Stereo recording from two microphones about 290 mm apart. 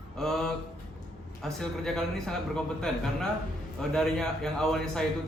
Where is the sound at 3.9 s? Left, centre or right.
Centre.